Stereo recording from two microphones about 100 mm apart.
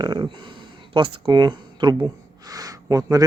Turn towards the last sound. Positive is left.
turn(degrees=-35)  # may be behind; listen again after turning